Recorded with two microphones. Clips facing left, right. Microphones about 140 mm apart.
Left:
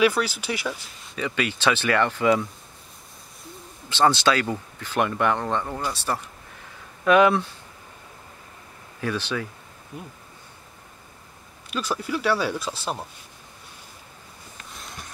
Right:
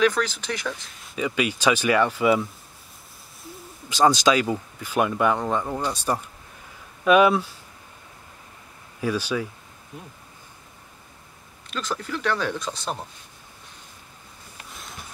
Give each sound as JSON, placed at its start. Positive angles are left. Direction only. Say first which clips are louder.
{"t": 0.0, "sound": "speech", "louder": "left 1 dB", "side_deg": 10}
{"t": 1.1, "sound": "speech", "louder": "right 2 dB", "side_deg": -15}
{"t": 3.9, "sound": "speech", "louder": "right 1 dB", "side_deg": -15}
{"t": 9.0, "sound": "speech", "louder": "right 2 dB", "side_deg": -10}
{"t": 11.7, "sound": "speech", "louder": "left 2 dB", "side_deg": 10}
{"t": 14.7, "sound": "a sound", "louder": "even", "side_deg": 0}